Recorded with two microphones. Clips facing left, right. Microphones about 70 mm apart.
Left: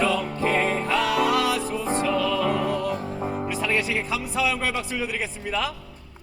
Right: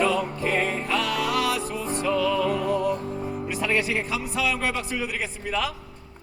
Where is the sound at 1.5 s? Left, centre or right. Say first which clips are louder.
Left 3 dB; left.